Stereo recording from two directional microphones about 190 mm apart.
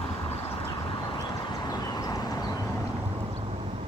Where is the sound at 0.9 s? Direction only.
25° left (ahead or behind).